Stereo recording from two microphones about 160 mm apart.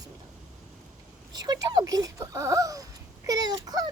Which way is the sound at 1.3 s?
25° right (ahead or behind).